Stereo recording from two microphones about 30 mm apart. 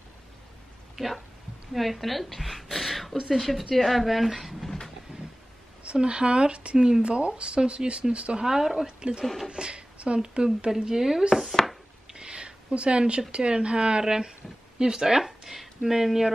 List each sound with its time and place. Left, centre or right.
0.9 s a woman's voice: centre
5.9 s speech: right
8.5 s speech: centre
8.8 s speech: right
9.2 s a woman's voice: centre
9.5 s speech: right
10.7 s speech: centre
12.1 s a sound: right
13.3 s speech: right
14.0 s speech: centre